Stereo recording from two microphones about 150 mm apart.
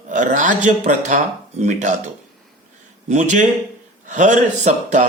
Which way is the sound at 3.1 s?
55° right (ahead or behind).